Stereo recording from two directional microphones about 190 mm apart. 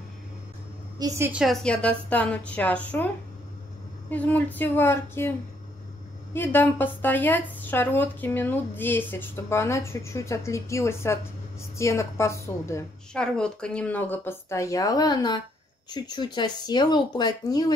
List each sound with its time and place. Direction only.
0.9 s a woman's voice: 15° right (ahead or behind); by 3.1 s 5° left (ahead or behind)
4.1 s a woman's voice: 10° left (ahead or behind)
6.3 s a woman's voice: 10° left (ahead or behind)
13.1 s a woman's voice: 5° left (ahead or behind); by 17.7 s 20° left (ahead or behind)